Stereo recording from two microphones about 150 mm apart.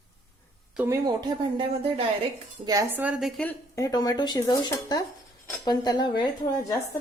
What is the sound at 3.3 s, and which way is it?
Speech, 5° left (ahead or behind).